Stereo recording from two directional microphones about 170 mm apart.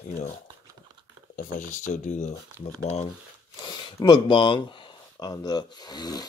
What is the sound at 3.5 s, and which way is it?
Speech, 25° left (ahead or behind).